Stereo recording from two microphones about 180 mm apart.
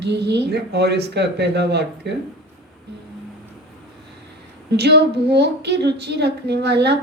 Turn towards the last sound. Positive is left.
turn(degrees=-65)  # may be behind; listen again after turning